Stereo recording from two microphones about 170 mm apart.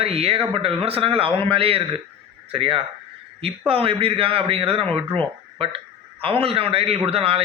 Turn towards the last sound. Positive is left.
turn(degrees=-35)  # may be behind; listen again after turning